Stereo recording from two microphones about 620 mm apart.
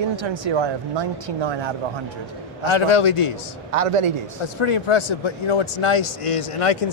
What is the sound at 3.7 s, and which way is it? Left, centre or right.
Speech, right.